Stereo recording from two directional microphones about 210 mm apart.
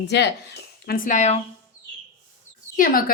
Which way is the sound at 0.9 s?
40° left (ahead or behind).